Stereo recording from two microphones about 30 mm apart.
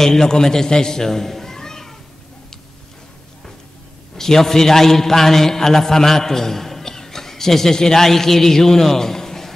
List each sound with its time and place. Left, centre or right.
0.0 s a man's voice: centre
4.2 s a man's voice: centre